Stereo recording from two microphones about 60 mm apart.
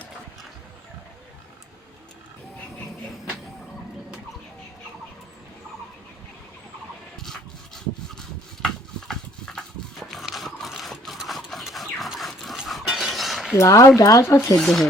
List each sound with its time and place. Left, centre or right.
8.6 s a sound: centre
13.6 s speech: left
14.6 s speech: centre